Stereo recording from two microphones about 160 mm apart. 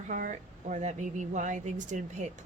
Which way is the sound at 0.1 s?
55° right (ahead or behind).